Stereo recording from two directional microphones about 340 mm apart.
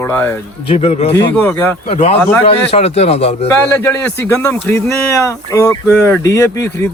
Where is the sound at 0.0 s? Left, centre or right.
Centre.